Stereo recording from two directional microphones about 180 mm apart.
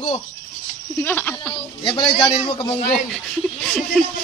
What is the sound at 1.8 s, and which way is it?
Speech, 30° left (ahead or behind).